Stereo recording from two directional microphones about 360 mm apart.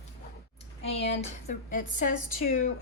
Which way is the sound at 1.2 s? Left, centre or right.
Left.